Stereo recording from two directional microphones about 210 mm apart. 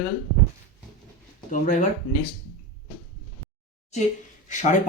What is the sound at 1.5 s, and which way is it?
Speech, 35° left (ahead or behind).